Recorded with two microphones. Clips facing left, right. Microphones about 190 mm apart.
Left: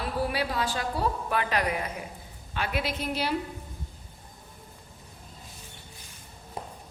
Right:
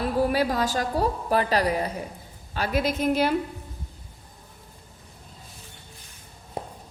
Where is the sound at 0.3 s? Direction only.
40° right (ahead or behind).